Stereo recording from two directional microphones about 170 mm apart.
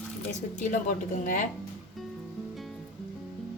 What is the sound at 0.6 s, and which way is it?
Speech, 50° left (ahead or behind).